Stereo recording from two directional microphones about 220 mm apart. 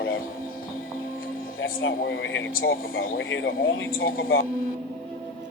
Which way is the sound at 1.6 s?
55° left (ahead or behind).